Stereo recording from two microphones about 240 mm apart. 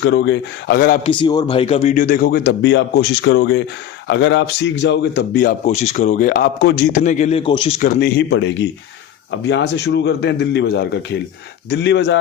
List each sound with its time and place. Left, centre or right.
0.0 s a man's voice: left
1.0 s a man's voice: left
5.6 s a man's voice: left
7.8 s a man's voice: left